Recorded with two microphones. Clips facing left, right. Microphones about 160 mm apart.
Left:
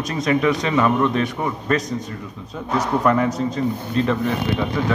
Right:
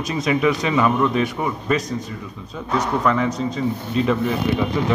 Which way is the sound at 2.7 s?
5° left (ahead or behind).